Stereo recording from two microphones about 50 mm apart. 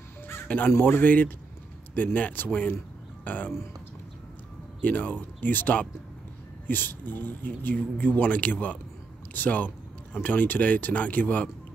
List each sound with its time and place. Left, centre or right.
0.4 s speech: left
0.7 s speech: left
1.0 s speech: left
4.8 s speech: left